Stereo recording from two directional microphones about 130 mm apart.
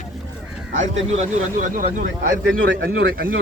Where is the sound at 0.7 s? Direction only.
70° right (ahead or behind).